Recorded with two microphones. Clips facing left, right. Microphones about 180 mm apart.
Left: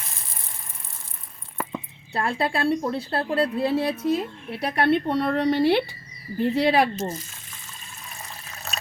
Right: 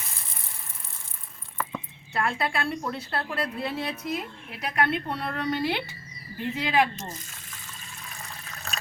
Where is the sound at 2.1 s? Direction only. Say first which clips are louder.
Left 3 dB; 30° left (ahead or behind).